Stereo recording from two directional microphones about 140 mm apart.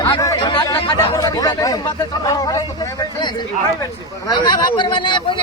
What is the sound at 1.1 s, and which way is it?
A man's voice, 25° left (ahead or behind).